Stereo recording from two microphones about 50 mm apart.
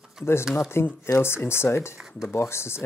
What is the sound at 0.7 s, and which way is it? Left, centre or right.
Speech, left.